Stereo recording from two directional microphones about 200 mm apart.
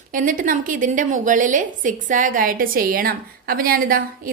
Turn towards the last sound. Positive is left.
turn(degrees=-45)  # may be behind; listen again after turning